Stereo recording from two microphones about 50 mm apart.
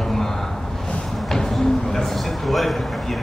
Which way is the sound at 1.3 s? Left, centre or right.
Centre.